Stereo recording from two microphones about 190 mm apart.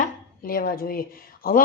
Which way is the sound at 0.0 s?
50° left (ahead or behind).